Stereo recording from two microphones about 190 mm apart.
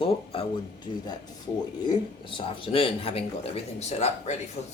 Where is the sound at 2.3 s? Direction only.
25° left (ahead or behind).